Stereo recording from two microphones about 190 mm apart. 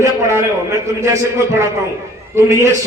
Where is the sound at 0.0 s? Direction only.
15° right (ahead or behind).